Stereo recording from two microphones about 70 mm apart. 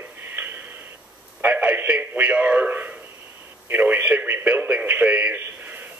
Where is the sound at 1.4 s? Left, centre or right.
Right.